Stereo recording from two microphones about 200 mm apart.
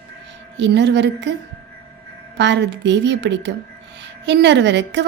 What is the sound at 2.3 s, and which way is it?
A woman's voice, 60° right (ahead or behind).